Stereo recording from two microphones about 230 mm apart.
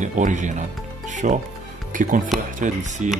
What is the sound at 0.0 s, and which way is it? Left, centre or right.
Speech, right.